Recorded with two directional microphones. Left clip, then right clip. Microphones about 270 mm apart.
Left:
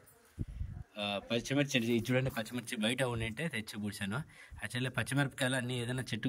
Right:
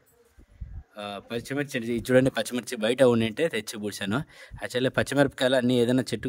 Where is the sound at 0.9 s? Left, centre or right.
Centre.